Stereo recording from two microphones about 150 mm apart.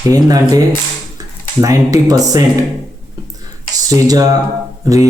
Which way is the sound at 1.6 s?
25° right (ahead or behind).